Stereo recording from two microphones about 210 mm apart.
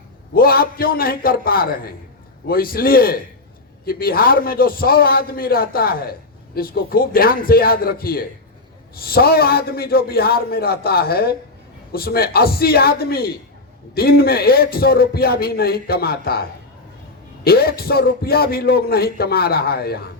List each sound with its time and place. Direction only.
0.3 s a man's voice: 45° left (ahead or behind)